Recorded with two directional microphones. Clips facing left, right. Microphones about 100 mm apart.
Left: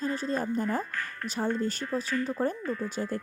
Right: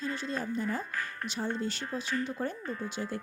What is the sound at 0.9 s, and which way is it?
Speech, 15° right (ahead or behind).